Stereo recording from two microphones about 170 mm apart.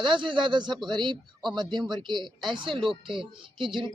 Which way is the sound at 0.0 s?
30° right (ahead or behind).